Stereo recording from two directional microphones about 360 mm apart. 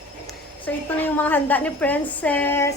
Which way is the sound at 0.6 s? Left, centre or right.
Centre.